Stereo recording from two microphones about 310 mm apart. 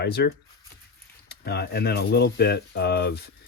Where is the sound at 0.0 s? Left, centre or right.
Left.